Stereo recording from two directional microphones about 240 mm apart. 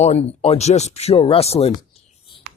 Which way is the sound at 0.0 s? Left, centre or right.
Left.